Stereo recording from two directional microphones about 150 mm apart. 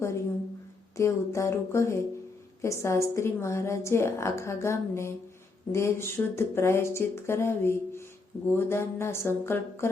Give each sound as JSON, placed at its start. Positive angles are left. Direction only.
{"t": 0.9, "sound": "a woman's voice", "side_deg": 20}